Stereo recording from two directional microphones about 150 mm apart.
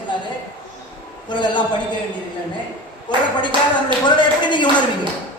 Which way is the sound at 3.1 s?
30° left (ahead or behind).